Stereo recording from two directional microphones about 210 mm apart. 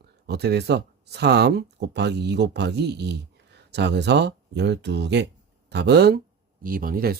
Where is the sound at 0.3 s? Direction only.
50° right (ahead or behind).